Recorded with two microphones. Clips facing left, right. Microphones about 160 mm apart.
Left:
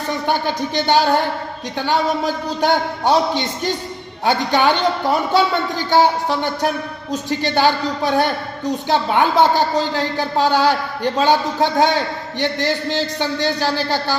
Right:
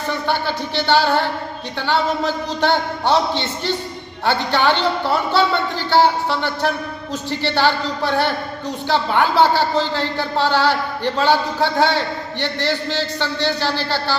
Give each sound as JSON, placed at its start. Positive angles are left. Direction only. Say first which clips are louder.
{"t": 0.3, "sound": "speech", "louder": "left 3 dB", "side_deg": 15}
{"t": 5.9, "sound": "speech", "louder": "even", "side_deg": 15}